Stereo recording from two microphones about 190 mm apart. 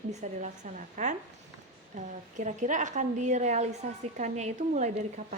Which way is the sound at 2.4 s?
40° right (ahead or behind).